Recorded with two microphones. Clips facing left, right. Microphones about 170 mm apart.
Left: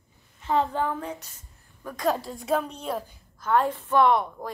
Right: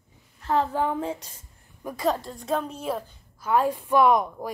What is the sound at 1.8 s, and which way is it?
Speech, 5° right (ahead or behind).